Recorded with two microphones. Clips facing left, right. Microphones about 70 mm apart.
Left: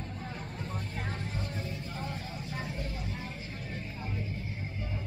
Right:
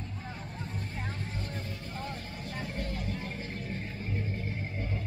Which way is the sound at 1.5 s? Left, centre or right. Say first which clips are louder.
Left 1 dB; right.